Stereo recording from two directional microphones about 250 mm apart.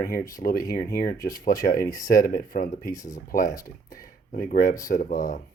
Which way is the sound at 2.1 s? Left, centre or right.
Left.